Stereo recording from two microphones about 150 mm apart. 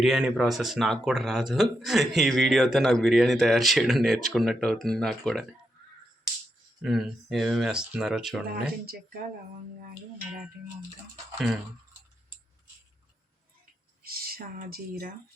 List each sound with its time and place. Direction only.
0.0 s speech: 5° right (ahead or behind)
6.8 s speech: centre (ahead or behind)
14.1 s speech: 85° right